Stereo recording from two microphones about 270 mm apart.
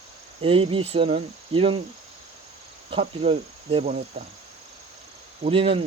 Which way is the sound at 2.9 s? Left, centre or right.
Right.